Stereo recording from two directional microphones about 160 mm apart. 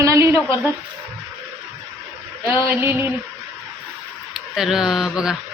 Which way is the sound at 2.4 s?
15° right (ahead or behind).